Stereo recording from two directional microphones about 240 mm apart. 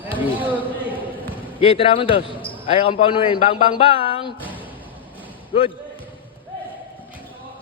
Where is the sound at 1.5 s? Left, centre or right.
Left.